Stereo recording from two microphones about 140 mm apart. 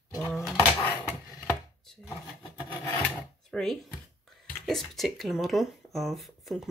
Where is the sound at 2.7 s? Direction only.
10° left (ahead or behind).